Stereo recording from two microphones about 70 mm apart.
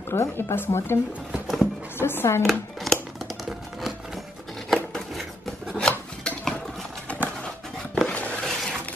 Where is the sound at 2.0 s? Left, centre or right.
Left.